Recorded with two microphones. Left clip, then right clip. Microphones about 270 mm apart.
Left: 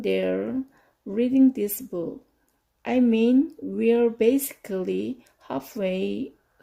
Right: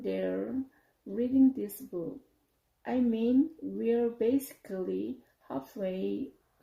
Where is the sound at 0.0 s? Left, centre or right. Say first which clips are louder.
Left 9 dB; left.